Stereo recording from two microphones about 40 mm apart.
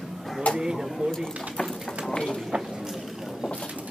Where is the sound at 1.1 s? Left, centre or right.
Centre.